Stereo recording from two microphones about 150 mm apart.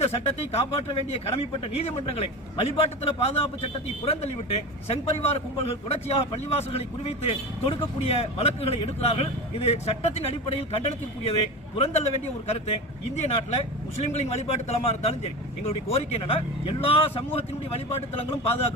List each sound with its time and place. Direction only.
0.0 s speech: 45° left (ahead or behind)